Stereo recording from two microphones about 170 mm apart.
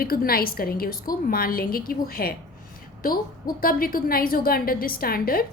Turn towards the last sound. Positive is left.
turn(degrees=60)  # may be behind; listen again after turning